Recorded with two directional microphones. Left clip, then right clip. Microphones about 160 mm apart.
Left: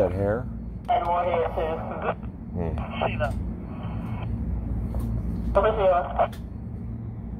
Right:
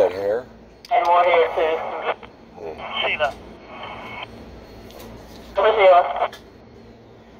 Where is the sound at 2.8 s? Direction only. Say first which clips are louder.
Right 7 dB; 20° right (ahead or behind).